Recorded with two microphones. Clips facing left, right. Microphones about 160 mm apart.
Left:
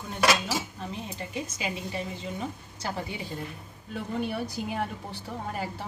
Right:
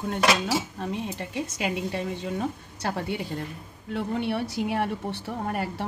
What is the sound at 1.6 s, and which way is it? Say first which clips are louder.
Speech: right 6 dB; 65° right (ahead or behind).